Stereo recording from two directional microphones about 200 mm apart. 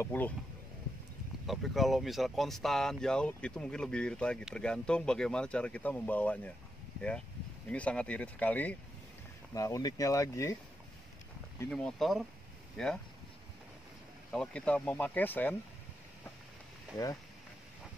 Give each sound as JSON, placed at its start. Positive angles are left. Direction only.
{"t": 0.0, "sound": "speech", "side_deg": 10}
{"t": 1.5, "sound": "speech", "side_deg": 0}
{"t": 7.7, "sound": "speech", "side_deg": 5}
{"t": 11.7, "sound": "speech", "side_deg": 0}
{"t": 14.3, "sound": "speech", "side_deg": 5}